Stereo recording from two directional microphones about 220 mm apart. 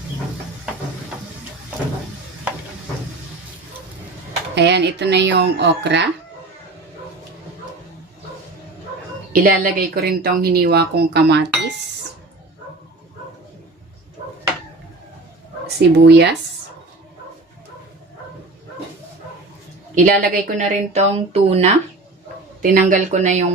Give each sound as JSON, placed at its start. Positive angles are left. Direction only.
{"t": 4.5, "sound": "speech", "side_deg": -50}
{"t": 9.3, "sound": "speech", "side_deg": -40}
{"t": 15.6, "sound": "speech", "side_deg": -50}
{"t": 20.0, "sound": "speech", "side_deg": -40}
{"t": 22.6, "sound": "speech", "side_deg": -40}